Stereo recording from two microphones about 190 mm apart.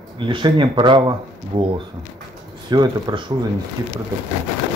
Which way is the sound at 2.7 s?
20° right (ahead or behind).